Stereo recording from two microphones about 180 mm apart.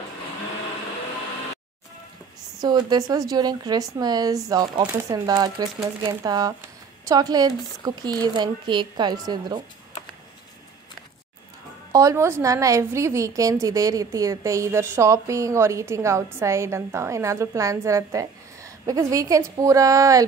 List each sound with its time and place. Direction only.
2.6 s speech: 20° right (ahead or behind)
11.9 s a woman's voice: 20° right (ahead or behind)